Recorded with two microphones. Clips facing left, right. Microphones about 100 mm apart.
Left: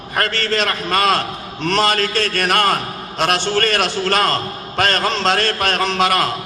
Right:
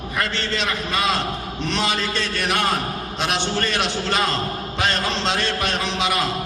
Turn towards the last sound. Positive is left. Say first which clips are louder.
# left 6 dB
turn(degrees=55)  # may be behind; listen again after turning